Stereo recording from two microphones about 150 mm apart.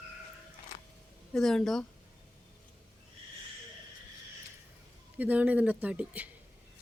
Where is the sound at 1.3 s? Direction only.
5° left (ahead or behind).